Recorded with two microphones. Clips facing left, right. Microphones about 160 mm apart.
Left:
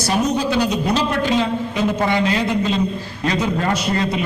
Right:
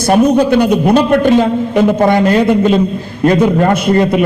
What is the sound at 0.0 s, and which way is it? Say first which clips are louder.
A man's voice: right 10 dB; 55° right (ahead or behind).